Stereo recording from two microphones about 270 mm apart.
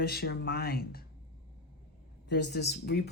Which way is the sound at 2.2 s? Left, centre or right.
Left.